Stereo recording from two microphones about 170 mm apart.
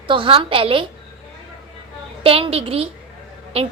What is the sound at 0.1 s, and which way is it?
Speech, 30° right (ahead or behind).